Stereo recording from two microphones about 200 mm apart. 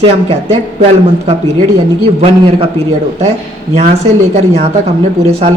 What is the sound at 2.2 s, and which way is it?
Speech, 30° right (ahead or behind).